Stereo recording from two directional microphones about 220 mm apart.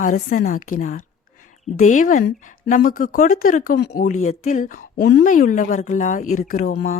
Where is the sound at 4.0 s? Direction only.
35° left (ahead or behind).